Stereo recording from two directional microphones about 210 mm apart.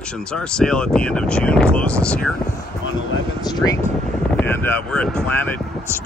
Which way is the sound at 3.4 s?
20° left (ahead or behind).